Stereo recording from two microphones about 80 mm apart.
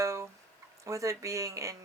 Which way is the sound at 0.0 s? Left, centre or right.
Right.